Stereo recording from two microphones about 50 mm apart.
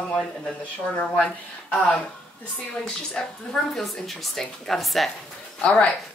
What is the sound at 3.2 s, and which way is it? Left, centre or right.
Speech, centre.